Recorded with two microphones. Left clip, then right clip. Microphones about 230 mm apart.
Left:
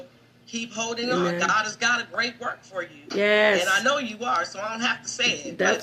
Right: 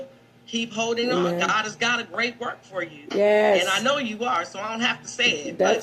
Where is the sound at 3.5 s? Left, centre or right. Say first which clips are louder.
Right 1 dB; right.